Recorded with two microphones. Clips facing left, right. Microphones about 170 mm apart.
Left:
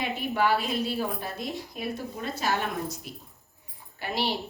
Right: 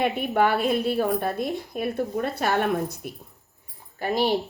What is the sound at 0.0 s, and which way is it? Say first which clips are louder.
A woman's voice: right 5 dB; 55° right (ahead or behind).